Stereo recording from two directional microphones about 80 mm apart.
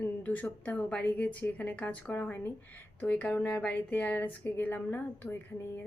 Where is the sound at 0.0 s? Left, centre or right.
Left.